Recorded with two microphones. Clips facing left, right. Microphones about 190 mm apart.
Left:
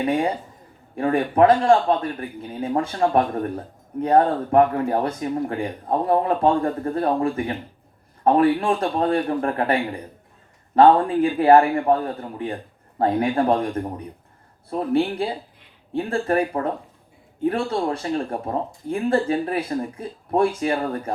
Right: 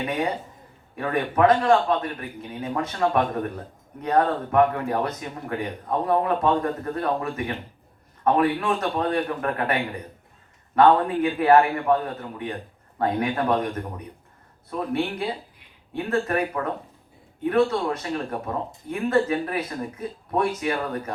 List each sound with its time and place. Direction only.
0.9 s a man's voice: 30° left (ahead or behind)
10.8 s speech: 30° left (ahead or behind)
13.0 s a man's voice: 30° left (ahead or behind)